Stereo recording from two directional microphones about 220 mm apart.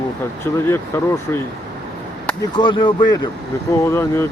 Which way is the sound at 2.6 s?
20° left (ahead or behind).